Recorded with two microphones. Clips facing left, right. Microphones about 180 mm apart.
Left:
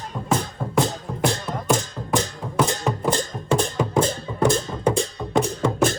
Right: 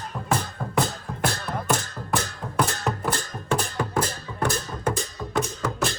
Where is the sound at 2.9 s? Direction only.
Centre (ahead or behind).